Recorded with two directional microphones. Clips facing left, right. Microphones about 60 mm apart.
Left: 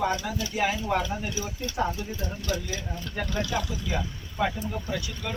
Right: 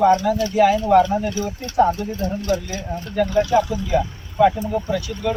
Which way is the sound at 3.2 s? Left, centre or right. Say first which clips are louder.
Right 12 dB; right.